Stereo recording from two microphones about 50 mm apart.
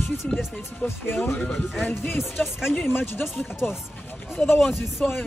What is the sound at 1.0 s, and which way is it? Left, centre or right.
Speech, left.